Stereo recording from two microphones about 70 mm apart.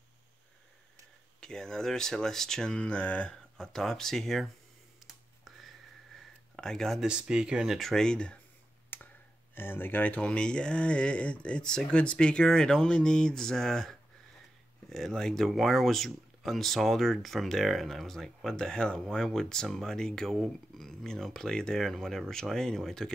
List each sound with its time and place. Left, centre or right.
1.4 s speech: centre
3.5 s speech: centre
5.0 s a sound: centre
6.5 s speech: centre
7.0 s speech: centre
7.8 s speech: centre
8.9 s clicking: left
9.6 s speech: left; by 23.1 s centre